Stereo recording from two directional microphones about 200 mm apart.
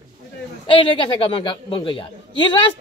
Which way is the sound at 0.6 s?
25° left (ahead or behind).